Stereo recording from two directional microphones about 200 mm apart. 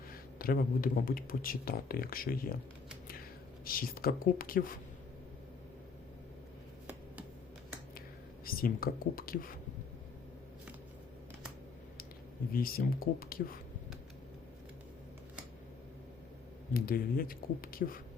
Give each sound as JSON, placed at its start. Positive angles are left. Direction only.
{"t": 0.3, "sound": "speech", "side_deg": 45}
{"t": 3.6, "sound": "speech", "side_deg": 45}
{"t": 8.4, "sound": "speech", "side_deg": 45}
{"t": 12.5, "sound": "speech", "side_deg": 45}
{"t": 16.7, "sound": "speech", "side_deg": 45}